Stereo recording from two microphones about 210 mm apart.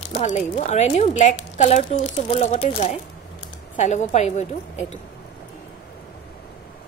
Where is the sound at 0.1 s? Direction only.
35° left (ahead or behind).